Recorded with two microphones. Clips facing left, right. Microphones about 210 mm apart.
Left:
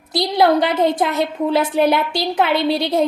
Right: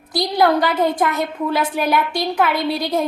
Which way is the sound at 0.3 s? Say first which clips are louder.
Left 1 dB; 25° left (ahead or behind).